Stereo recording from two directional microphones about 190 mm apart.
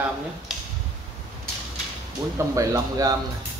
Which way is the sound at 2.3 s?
20° right (ahead or behind).